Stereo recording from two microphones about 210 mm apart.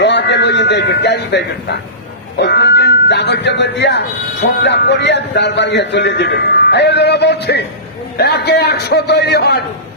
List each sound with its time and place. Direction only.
0.0 s a man's voice: 55° left (ahead or behind)